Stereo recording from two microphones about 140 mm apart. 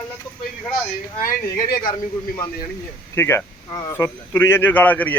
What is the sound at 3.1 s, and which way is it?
Speech, 15° left (ahead or behind).